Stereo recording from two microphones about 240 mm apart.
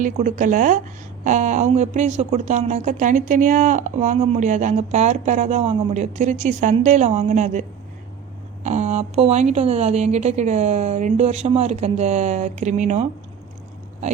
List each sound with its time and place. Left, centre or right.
0.0 s speech: right
8.6 s speech: right